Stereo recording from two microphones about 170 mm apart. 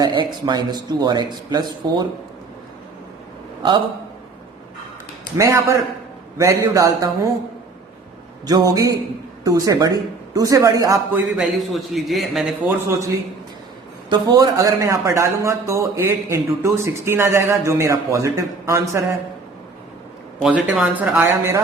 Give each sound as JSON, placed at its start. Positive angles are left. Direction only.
{"t": 0.0, "sound": "a man's voice", "side_deg": -25}
{"t": 5.4, "sound": "a man's voice", "side_deg": -20}
{"t": 8.4, "sound": "a man's voice", "side_deg": -20}
{"t": 12.6, "sound": "speech", "side_deg": -15}
{"t": 14.1, "sound": "speech", "side_deg": -25}
{"t": 20.4, "sound": "a man's voice", "side_deg": -5}
{"t": 21.2, "sound": "speech", "side_deg": -15}